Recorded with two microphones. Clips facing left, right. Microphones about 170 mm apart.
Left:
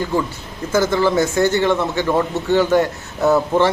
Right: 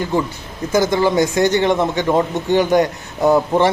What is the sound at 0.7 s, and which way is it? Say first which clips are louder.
A man's voice: right 1 dB; 15° right (ahead or behind).